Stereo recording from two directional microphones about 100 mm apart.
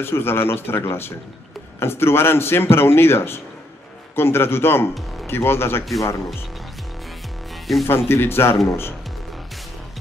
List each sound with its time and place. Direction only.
0.0 s a man's voice: 25° left (ahead or behind)
7.7 s speech: centre (ahead or behind)
8.1 s a man's voice: 25° left (ahead or behind)